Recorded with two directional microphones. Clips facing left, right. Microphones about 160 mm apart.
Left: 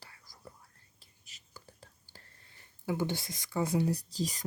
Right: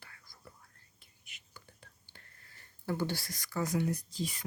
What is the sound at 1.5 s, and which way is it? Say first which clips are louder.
Whispering: left 4 dB; 35° left (ahead or behind).